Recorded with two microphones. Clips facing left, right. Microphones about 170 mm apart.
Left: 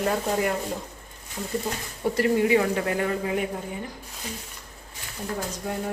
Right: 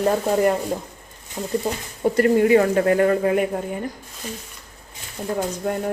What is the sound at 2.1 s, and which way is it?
Speech, 50° right (ahead or behind).